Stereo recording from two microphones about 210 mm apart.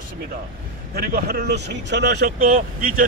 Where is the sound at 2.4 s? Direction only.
40° right (ahead or behind).